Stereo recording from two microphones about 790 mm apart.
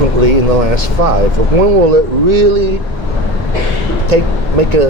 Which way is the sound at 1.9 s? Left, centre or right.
Right.